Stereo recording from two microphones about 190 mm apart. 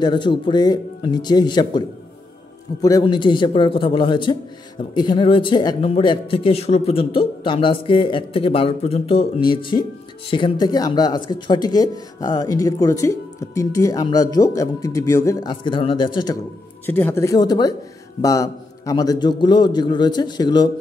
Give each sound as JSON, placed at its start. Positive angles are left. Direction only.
{"t": 0.0, "sound": "speech", "side_deg": 25}
{"t": 16.8, "sound": "speech", "side_deg": 10}